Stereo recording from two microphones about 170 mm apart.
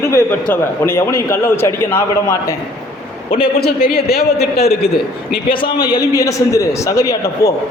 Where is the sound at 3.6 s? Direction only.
65° left (ahead or behind).